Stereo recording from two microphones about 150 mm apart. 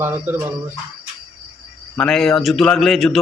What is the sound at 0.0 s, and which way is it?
Speech, 15° right (ahead or behind).